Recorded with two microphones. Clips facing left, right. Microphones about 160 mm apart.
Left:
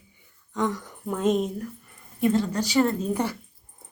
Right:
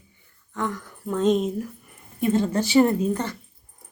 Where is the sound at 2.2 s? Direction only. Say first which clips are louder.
Right 1 dB; 25° right (ahead or behind).